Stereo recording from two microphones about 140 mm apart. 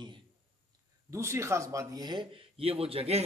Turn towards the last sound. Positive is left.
turn(degrees=-45)  # may be behind; listen again after turning